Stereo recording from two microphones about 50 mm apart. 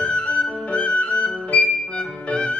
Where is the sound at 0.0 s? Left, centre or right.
Left.